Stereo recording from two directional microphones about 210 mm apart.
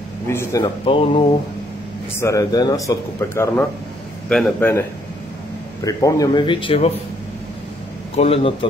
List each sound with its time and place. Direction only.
0.3 s a man's voice: 15° left (ahead or behind)
5.9 s a man's voice: 15° left (ahead or behind)
8.2 s a man's voice: 30° left (ahead or behind)